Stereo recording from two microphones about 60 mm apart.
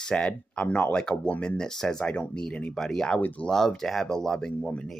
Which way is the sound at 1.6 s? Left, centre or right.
Centre.